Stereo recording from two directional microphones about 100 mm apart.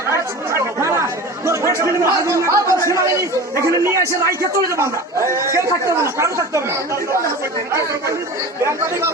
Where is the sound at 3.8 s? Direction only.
30° right (ahead or behind).